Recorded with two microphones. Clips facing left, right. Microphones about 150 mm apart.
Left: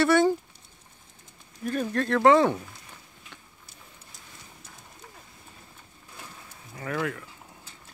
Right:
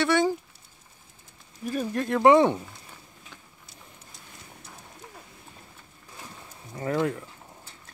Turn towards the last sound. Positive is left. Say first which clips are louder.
# right 4 dB
turn(degrees=-25)  # may be behind; listen again after turning